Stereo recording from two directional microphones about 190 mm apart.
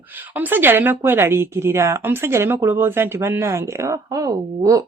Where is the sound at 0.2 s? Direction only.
10° right (ahead or behind).